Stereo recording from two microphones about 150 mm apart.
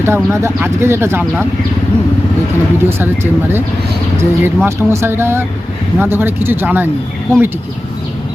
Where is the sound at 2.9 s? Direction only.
15° right (ahead or behind).